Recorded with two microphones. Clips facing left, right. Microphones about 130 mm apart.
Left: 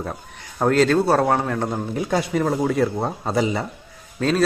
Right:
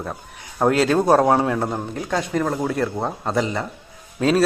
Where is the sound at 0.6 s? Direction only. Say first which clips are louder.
Even; 10° right (ahead or behind).